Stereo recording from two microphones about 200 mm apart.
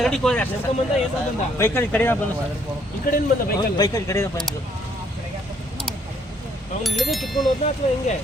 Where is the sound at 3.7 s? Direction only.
20° left (ahead or behind).